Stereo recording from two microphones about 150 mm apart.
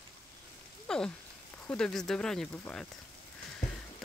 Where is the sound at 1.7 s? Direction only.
5° left (ahead or behind).